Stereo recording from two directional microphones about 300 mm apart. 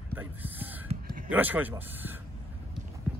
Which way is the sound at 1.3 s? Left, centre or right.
Centre.